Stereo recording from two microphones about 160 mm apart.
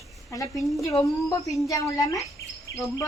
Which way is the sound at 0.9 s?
20° left (ahead or behind).